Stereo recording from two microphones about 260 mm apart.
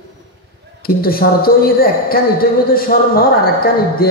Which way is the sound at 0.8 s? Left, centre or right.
Left.